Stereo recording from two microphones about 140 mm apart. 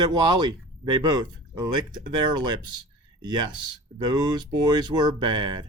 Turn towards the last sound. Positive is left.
turn(degrees=-35)  # may be behind; listen again after turning